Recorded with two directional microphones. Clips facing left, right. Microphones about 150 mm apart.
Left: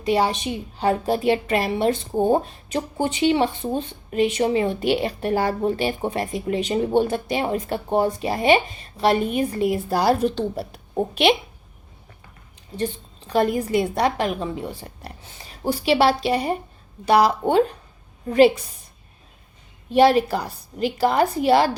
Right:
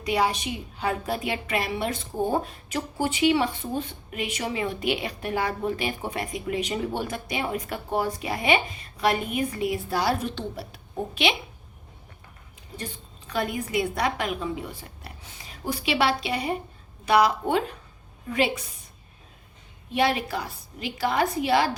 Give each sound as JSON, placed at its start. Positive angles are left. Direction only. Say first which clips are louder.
{"t": 0.0, "sound": "a woman's voice", "louder": "left 4 dB", "side_deg": 30}
{"t": 12.7, "sound": "a woman's voice", "louder": "left 11 dB", "side_deg": 30}
{"t": 19.9, "sound": "a woman's voice", "louder": "left 9 dB", "side_deg": 35}